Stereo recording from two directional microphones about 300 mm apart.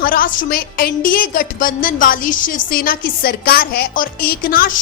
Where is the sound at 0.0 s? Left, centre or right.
Left.